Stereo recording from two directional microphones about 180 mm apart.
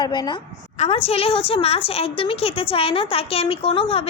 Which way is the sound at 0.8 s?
35° left (ahead or behind).